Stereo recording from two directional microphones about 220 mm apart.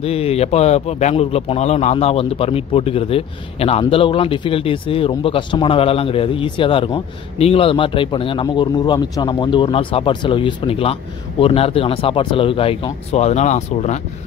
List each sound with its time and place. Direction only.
0.0 s a man's voice: 25° left (ahead or behind)